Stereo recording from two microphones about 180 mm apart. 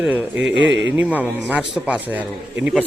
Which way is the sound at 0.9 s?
10° right (ahead or behind).